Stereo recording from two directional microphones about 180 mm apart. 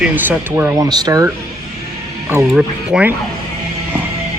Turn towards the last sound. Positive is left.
turn(degrees=-5)  # may be behind; listen again after turning